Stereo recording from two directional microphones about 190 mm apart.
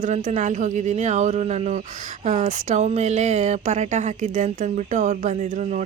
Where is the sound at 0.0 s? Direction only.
40° right (ahead or behind).